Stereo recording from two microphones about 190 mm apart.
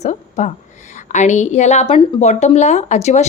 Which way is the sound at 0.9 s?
40° left (ahead or behind).